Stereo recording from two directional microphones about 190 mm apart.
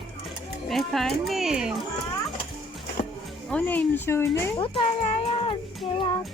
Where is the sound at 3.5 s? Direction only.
5° left (ahead or behind).